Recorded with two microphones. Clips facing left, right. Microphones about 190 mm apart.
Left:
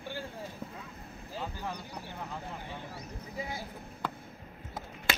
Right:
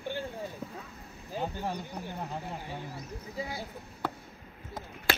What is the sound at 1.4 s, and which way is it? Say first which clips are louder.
Speech: right 5 dB; 30° right (ahead or behind).